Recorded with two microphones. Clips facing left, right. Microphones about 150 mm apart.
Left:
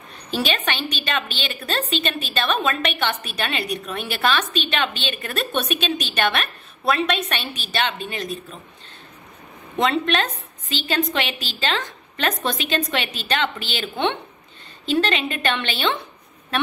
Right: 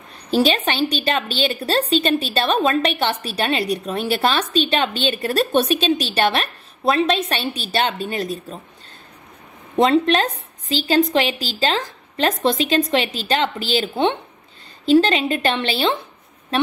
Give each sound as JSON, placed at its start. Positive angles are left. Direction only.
{"t": 0.3, "sound": "a woman's voice", "side_deg": -35}
{"t": 9.8, "sound": "a woman's voice", "side_deg": -35}